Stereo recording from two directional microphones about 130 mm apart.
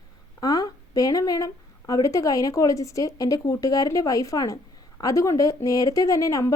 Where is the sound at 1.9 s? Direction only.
25° left (ahead or behind).